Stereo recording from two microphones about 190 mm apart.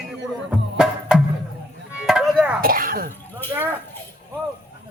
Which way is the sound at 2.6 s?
50° right (ahead or behind).